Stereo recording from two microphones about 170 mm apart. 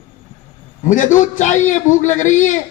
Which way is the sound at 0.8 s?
45° left (ahead or behind).